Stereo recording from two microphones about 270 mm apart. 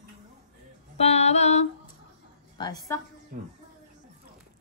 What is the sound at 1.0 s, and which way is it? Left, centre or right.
Music, left.